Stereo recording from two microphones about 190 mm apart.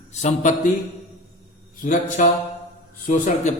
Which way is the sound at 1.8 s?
40° left (ahead or behind).